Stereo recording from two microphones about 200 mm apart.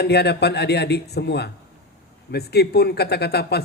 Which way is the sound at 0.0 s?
55° left (ahead or behind).